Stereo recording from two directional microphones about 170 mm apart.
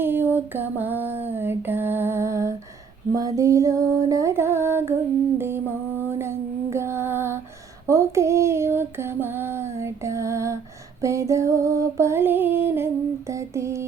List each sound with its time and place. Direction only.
0.0 s a sound: 10° right (ahead or behind)
5.4 s female singing: 15° right (ahead or behind)
11.0 s music: 15° right (ahead or behind)